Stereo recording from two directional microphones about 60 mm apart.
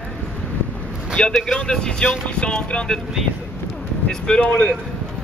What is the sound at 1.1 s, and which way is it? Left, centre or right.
Speech, centre.